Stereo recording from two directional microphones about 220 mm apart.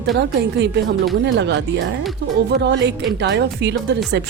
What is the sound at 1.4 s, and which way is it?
Speech, 50° right (ahead or behind).